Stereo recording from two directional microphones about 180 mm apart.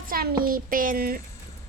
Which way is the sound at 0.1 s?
55° right (ahead or behind).